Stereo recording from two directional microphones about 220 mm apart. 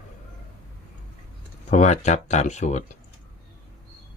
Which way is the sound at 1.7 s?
30° left (ahead or behind).